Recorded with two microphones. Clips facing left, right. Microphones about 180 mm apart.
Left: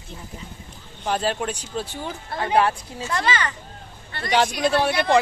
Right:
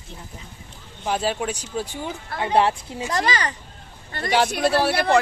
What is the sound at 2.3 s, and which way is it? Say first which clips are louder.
Speech: even; 25° left (ahead or behind).